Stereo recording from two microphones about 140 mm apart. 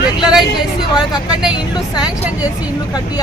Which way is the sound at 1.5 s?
30° left (ahead or behind).